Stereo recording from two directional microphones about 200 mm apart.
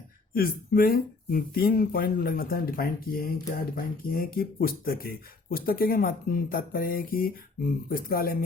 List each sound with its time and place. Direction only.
0.3 s speech: 45° left (ahead or behind)